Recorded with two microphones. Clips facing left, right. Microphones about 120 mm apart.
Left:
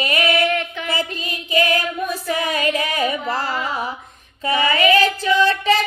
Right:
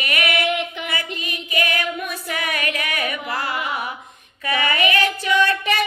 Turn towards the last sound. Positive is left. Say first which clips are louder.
# left 3 dB
turn(degrees=25)  # may be behind; listen again after turning